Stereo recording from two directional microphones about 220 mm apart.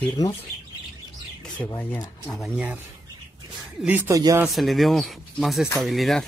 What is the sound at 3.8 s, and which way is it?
Speech, 10° right (ahead or behind).